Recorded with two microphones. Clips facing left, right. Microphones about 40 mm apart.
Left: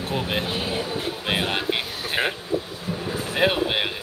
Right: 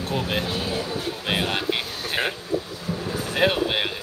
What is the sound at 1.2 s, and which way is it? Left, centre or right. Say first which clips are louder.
Speech: even; centre.